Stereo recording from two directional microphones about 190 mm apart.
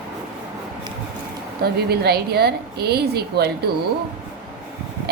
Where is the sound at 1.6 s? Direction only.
55° right (ahead or behind).